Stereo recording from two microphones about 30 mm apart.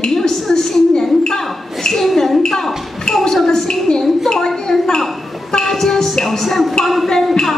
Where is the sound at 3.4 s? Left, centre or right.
Centre.